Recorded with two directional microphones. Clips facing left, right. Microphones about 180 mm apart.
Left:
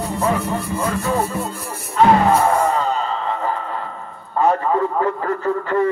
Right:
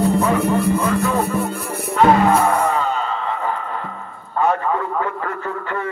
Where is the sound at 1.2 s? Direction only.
60° right (ahead or behind).